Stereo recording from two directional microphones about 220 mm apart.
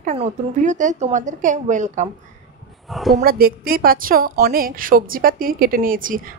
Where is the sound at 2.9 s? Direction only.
Centre (ahead or behind).